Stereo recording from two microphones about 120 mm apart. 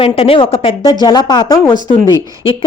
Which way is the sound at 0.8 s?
35° left (ahead or behind).